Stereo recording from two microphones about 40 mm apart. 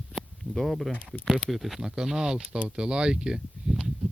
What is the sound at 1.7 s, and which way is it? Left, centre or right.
Speech, centre.